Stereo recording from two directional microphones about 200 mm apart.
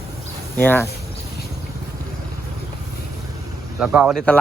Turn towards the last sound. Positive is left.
turn(degrees=-5)  # may be behind; listen again after turning